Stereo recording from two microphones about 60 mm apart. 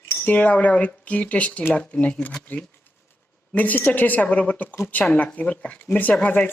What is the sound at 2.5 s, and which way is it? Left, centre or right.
Speech, left.